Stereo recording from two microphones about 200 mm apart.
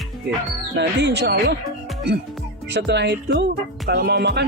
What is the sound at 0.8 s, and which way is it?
Speech, 60° right (ahead or behind).